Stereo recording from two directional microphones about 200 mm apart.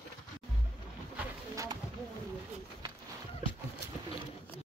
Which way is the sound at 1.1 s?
15° right (ahead or behind).